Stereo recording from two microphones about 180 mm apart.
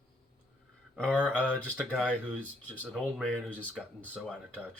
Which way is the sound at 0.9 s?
5° left (ahead or behind).